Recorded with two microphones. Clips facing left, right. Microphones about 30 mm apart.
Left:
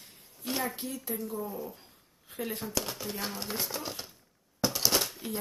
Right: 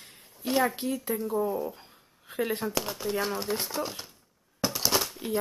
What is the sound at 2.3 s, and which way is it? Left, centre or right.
Shuffling cards, right.